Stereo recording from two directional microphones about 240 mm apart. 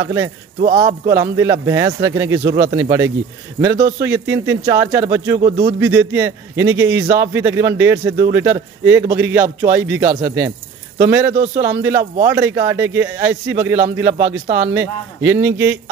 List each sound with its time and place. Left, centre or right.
0.0 s a man's voice: centre
0.6 s speech: right
0.8 s a man's voice: centre
5.8 s a man's voice: centre
11.3 s a man's voice: right
11.7 s a man's voice: centre